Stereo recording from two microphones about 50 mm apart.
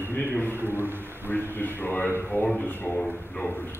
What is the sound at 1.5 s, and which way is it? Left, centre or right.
A man's voice, left.